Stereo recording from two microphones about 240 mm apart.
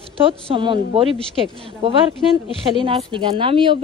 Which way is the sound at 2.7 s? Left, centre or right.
Right.